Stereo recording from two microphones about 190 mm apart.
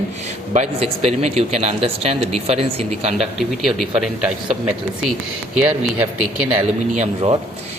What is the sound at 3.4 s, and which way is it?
Speech, centre (ahead or behind).